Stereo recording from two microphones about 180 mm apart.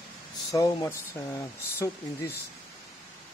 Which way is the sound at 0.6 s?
15° left (ahead or behind).